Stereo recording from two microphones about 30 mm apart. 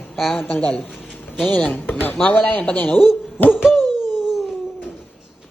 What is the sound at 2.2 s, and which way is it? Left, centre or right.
Speech, left.